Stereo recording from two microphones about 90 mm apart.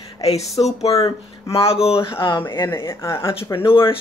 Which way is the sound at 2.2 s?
60° left (ahead or behind).